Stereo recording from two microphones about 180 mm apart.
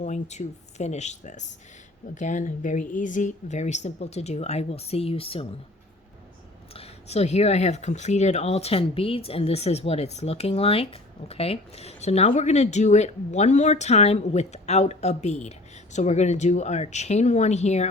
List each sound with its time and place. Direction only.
0.0 s speech: 40° left (ahead or behind)
6.7 s speech: 35° left (ahead or behind)